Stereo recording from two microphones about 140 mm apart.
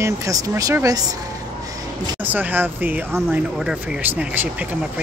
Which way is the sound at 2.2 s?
15° right (ahead or behind).